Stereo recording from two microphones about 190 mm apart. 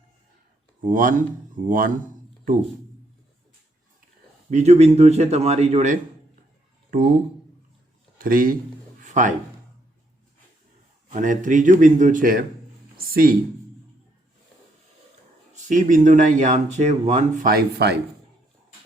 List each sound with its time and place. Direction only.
0.9 s speech: 45° right (ahead or behind)
4.5 s speech: 35° right (ahead or behind)
8.2 s speech: 45° right (ahead or behind)
9.0 s a sound: 40° right (ahead or behind)
11.1 s speech: 40° right (ahead or behind)
13.0 s a sound: 50° right (ahead or behind)
15.7 s speech: 40° right (ahead or behind)